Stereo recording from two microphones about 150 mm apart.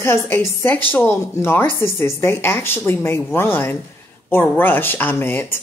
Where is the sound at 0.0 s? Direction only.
15° left (ahead or behind).